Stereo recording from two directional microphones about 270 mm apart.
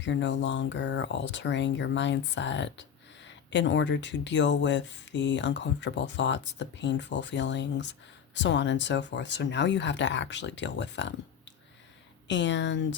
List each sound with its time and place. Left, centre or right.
0.0 s speech: left